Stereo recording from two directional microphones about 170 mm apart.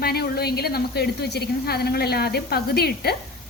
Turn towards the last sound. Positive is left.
turn(degrees=70)  # may be behind; listen again after turning